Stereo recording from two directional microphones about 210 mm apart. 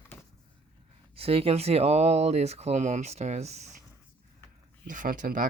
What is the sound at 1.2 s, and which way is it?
Speech, 30° right (ahead or behind).